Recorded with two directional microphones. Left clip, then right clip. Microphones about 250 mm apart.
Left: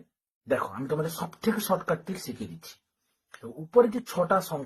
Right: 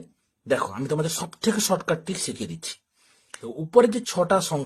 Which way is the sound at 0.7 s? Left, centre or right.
Right.